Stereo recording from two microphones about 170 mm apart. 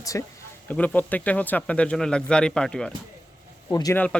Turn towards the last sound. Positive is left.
turn(degrees=20)  # may be behind; listen again after turning